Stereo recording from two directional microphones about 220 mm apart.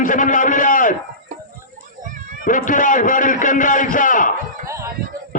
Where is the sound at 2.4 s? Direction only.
35° left (ahead or behind).